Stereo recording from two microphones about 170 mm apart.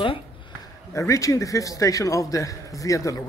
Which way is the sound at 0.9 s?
20° left (ahead or behind).